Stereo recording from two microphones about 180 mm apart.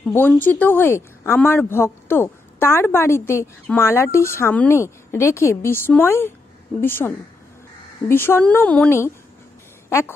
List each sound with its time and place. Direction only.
0.0 s a woman's voice: 10° left (ahead or behind)